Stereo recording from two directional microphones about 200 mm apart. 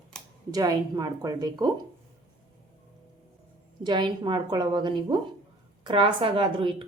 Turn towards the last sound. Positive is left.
turn(degrees=-25)  # may be behind; listen again after turning